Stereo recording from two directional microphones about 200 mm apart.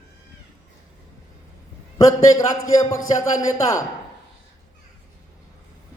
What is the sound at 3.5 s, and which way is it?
Speech, 15° left (ahead or behind).